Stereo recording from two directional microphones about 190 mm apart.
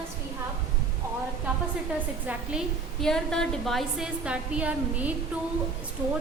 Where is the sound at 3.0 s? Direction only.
5° left (ahead or behind).